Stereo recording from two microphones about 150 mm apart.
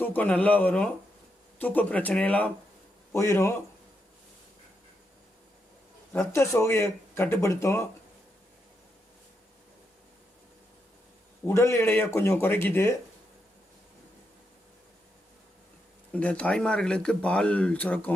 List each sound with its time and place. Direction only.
0.0 s speech: 10° left (ahead or behind)
6.1 s speech: 20° left (ahead or behind)
11.4 s speech: 20° left (ahead or behind)
16.1 s speech: 10° left (ahead or behind)